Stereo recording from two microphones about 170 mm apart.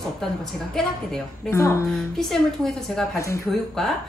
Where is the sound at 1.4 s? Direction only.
15° left (ahead or behind).